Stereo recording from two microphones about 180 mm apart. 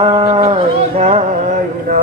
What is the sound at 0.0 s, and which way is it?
Mantra, 25° right (ahead or behind).